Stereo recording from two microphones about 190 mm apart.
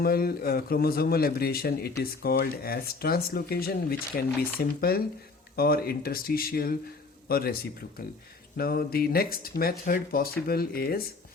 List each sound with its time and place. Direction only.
0.0 s speech: 50° left (ahead or behind)